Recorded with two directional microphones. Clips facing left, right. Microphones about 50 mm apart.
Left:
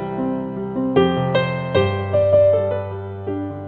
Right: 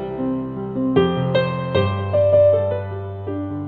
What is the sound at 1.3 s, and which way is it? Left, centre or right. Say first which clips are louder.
Music: left 1 dB; left.